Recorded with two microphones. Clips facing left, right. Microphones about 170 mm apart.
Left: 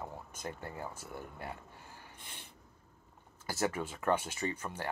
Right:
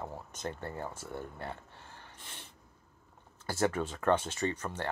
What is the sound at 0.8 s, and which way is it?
Speech, 10° left (ahead or behind).